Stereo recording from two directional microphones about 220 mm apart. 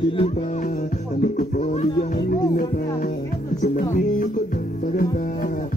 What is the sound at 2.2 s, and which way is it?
Music, 40° left (ahead or behind).